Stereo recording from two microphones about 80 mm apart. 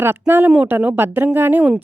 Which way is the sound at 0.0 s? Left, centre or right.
Right.